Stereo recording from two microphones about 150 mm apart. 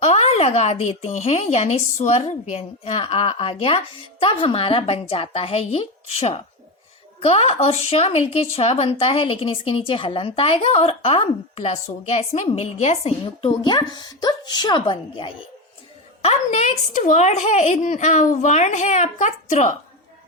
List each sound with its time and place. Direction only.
0.0 s a woman's voice: 45° left (ahead or behind)
16.2 s speech: 50° left (ahead or behind)